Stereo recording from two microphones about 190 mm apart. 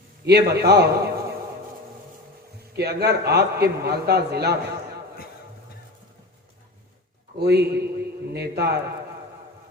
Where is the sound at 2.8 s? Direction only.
60° right (ahead or behind).